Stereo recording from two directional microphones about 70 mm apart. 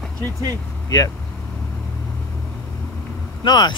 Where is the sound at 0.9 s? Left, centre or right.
Left.